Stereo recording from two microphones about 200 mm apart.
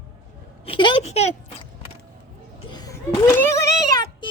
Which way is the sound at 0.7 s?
25° left (ahead or behind).